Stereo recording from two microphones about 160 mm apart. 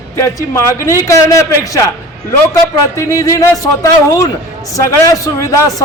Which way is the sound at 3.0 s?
20° left (ahead or behind).